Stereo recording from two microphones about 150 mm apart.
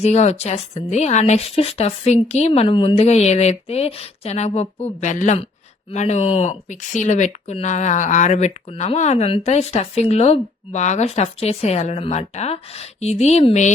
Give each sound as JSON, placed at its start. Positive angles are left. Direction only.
{"t": 0.0, "sound": "speech", "side_deg": 45}